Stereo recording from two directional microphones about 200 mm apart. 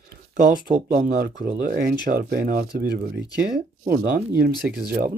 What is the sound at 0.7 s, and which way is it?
Speech, 40° right (ahead or behind).